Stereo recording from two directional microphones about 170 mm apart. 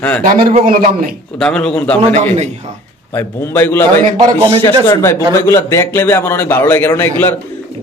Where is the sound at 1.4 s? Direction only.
5° left (ahead or behind).